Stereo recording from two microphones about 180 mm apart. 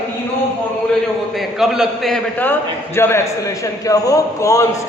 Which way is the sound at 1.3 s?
Centre (ahead or behind).